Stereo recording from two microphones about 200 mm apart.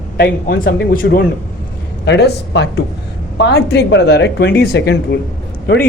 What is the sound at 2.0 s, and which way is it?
A man's voice, 60° left (ahead or behind).